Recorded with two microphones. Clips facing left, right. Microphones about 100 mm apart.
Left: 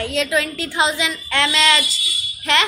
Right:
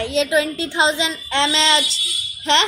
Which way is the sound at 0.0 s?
20° right (ahead or behind).